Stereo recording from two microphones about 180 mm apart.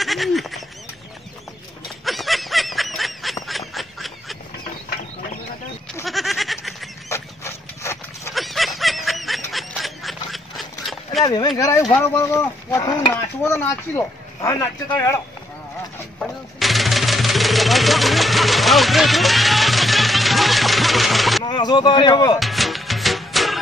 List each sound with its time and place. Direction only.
0.0 s goose: centre (ahead or behind)
2.0 s snicker: centre (ahead or behind)
3.4 s duck: centre (ahead or behind)
6.0 s a sound: centre (ahead or behind)
7.1 s dog: 15° left (ahead or behind)
8.4 s snicker: centre (ahead or behind)
11.2 s speech: 25° left (ahead or behind)
16.2 s a sound: centre (ahead or behind)
21.5 s speech: 25° left (ahead or behind)
22.4 s music: centre (ahead or behind)